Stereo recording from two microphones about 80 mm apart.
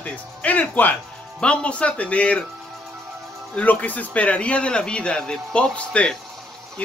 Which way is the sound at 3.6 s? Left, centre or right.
Centre.